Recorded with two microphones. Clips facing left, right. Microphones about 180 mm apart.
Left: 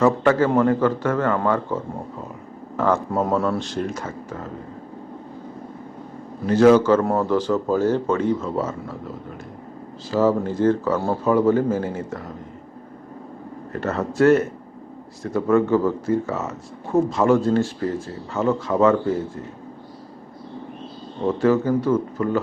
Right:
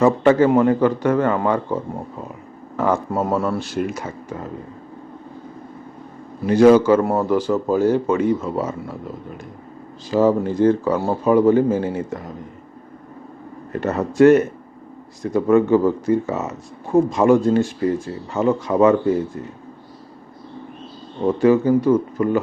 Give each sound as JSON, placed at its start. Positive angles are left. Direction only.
{"t": 0.0, "sound": "speech", "side_deg": -20}
{"t": 6.4, "sound": "speech", "side_deg": -15}
{"t": 10.1, "sound": "speech", "side_deg": -15}
{"t": 13.7, "sound": "speech", "side_deg": -15}
{"t": 21.4, "sound": "speech", "side_deg": -15}